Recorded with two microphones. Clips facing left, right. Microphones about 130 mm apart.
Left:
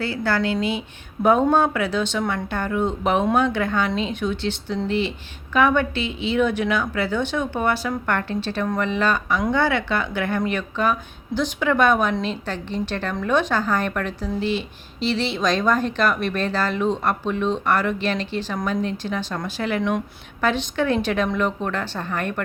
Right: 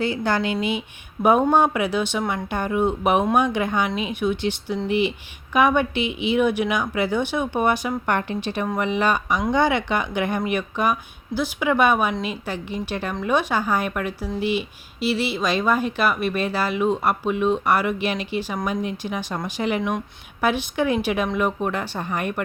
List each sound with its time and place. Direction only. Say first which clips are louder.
0.0 s speech: even; 20° right (ahead or behind)